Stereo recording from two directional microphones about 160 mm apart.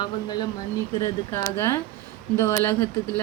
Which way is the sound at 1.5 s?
15° left (ahead or behind).